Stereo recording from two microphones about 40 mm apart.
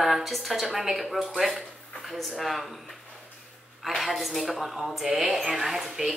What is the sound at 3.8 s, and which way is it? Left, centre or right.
A child's voice, centre.